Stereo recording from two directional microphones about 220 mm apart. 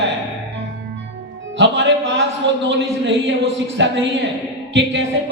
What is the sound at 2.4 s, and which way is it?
Speech, 55° right (ahead or behind).